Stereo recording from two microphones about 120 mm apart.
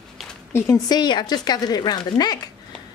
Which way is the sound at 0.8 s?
35° left (ahead or behind).